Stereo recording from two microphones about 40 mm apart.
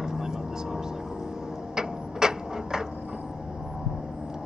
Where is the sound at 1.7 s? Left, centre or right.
Centre.